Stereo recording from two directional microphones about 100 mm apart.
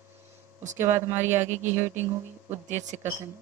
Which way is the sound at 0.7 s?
25° right (ahead or behind).